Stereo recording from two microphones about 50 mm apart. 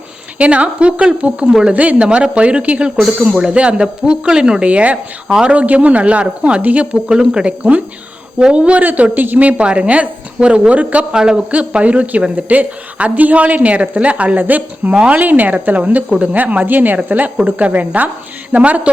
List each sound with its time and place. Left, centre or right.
0.3 s a woman's voice: right
1.7 s a woman's voice: right; by 4.6 s centre
4.6 s a woman's voice: right
7.1 s a woman's voice: centre
8.8 s a woman's voice: right
11.1 s speech: centre
11.5 s a woman's voice: right